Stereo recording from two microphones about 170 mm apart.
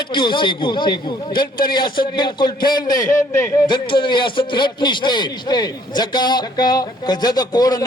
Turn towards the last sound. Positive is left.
turn(degrees=25)  # may be behind; listen again after turning